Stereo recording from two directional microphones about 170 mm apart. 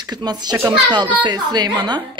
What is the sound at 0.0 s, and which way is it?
A woman's voice, 25° right (ahead or behind).